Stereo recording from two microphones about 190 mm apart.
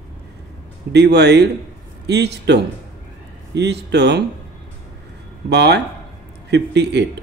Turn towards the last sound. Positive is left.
turn(degrees=-65)  # may be behind; listen again after turning